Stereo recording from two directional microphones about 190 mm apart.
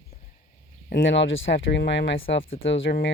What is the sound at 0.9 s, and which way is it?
Speech, 70° left (ahead or behind).